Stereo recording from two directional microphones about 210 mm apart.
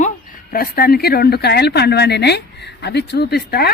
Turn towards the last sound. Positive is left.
turn(degrees=50)  # may be behind; listen again after turning